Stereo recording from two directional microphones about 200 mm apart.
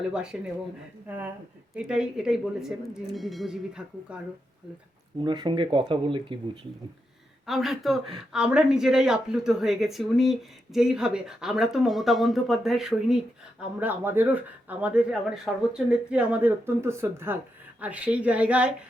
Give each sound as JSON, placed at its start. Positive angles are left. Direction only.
{"t": 0.1, "sound": "speech", "side_deg": -5}
{"t": 5.2, "sound": "speech", "side_deg": -25}
{"t": 7.4, "sound": "speech", "side_deg": 0}